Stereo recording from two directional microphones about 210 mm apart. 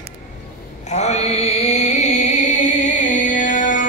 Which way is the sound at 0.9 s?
30° left (ahead or behind).